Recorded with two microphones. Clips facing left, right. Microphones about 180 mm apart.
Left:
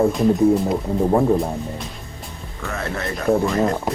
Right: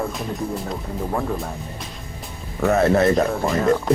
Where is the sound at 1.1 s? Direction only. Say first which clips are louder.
Left 8 dB; 20° left (ahead or behind).